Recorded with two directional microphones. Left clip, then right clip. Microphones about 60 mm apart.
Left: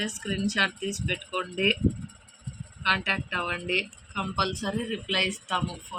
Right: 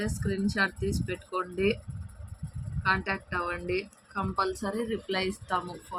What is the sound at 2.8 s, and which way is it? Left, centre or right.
Speech, centre.